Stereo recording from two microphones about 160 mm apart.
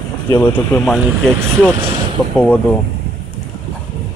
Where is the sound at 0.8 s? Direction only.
Centre (ahead or behind).